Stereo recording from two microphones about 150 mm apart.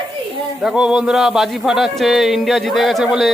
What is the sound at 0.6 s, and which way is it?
Speech, 5° right (ahead or behind).